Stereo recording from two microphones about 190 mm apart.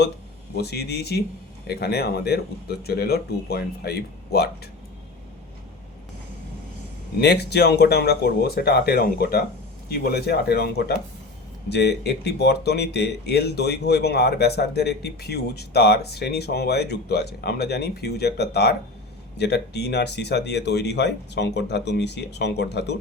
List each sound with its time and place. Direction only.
0.5 s speech: 60° left (ahead or behind)
7.2 s speech: 60° left (ahead or behind)